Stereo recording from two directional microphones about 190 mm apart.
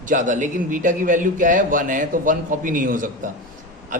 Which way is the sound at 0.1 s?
40° right (ahead or behind).